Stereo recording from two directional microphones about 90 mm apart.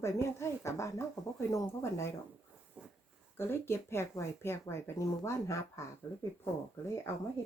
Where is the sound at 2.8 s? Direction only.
15° right (ahead or behind).